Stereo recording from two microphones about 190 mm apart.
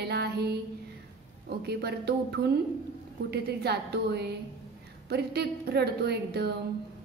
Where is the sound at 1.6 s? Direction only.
55° right (ahead or behind).